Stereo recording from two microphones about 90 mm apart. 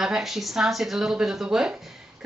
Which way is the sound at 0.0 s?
5° right (ahead or behind).